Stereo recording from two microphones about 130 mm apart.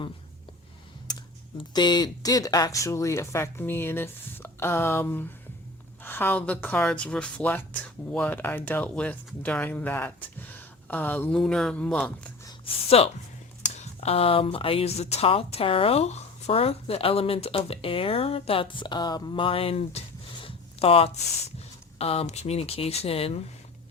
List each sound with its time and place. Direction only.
1.5 s speech: 35° left (ahead or behind); by 12.3 s 10° left (ahead or behind)
12.6 s speech: 50° left (ahead or behind)